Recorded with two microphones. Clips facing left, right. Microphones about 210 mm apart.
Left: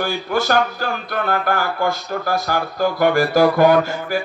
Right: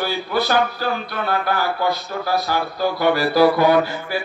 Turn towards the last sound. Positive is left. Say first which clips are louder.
# left 1 dB
turn(degrees=45)  # may be behind; listen again after turning